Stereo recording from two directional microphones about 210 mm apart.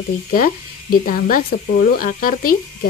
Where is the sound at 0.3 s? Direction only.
40° left (ahead or behind).